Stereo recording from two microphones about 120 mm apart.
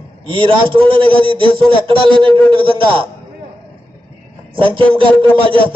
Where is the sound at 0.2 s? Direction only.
45° right (ahead or behind).